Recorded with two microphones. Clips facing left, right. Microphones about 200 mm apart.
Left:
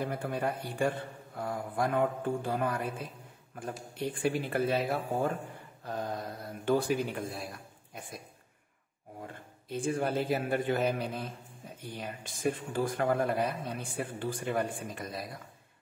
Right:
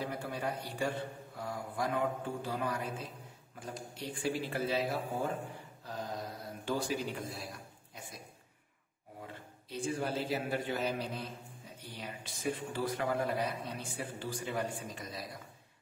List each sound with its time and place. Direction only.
0.0 s a man's voice: 55° left (ahead or behind)
3.9 s speech: 55° left (ahead or behind)
5.9 s mantra: 55° left (ahead or behind)
6.6 s a man's voice: 55° left (ahead or behind)
9.2 s a man's voice: 50° left (ahead or behind)